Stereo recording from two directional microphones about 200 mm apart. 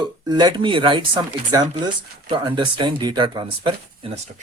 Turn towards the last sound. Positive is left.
turn(degrees=-30)  # may be behind; listen again after turning